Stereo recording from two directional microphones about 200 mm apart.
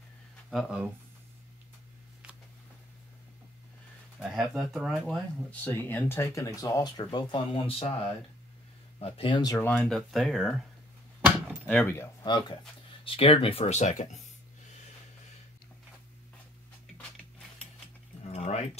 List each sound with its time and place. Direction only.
0.5 s speech: 5° right (ahead or behind)
4.2 s speech: centre (ahead or behind); by 9.7 s 20° left (ahead or behind)
9.7 s speech: 5° left (ahead or behind)
11.6 s speech: 10° left (ahead or behind); by 14.2 s 35° left (ahead or behind)
18.2 s keys jangling: 30° left (ahead or behind)